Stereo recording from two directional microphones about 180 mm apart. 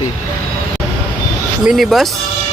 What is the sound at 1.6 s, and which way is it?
Speech, centre (ahead or behind).